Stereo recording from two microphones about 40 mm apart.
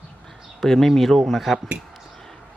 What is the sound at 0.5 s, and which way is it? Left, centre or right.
Speech, centre.